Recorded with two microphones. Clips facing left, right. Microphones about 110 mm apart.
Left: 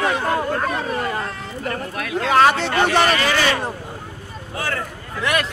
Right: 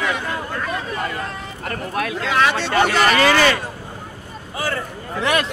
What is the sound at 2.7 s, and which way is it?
Speech, 65° right (ahead or behind).